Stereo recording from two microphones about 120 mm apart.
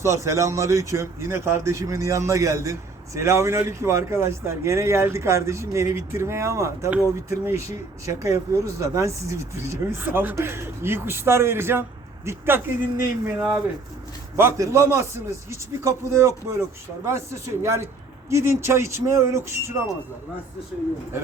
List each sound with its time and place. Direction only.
0.0 s speech: 25° right (ahead or behind)